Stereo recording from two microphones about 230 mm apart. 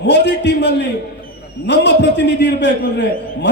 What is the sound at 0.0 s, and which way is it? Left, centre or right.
A man's voice, left.